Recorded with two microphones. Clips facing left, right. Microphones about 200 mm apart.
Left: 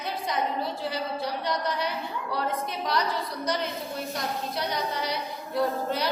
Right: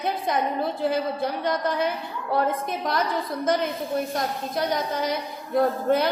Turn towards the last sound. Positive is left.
turn(degrees=-50)  # may be behind; listen again after turning